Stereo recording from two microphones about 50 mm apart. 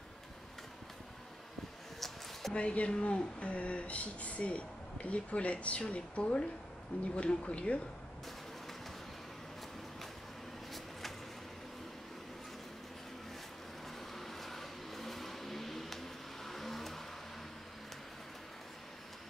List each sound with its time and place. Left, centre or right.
2.0 s a sound: centre
2.5 s speech: left
10.7 s vehicle: centre
14.1 s vehicle: centre